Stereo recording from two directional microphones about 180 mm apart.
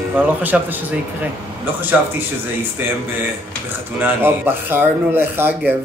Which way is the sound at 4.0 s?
10° right (ahead or behind).